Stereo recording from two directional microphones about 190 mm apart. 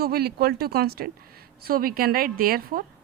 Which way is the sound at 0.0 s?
55° right (ahead or behind).